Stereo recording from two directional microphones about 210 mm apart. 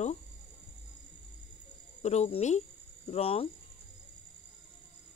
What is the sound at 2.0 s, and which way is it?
Speech, 30° left (ahead or behind).